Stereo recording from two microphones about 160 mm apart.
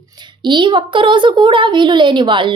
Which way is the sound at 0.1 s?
30° right (ahead or behind).